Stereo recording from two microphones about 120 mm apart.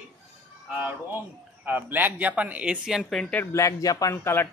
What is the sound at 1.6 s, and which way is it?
Speech, 15° right (ahead or behind).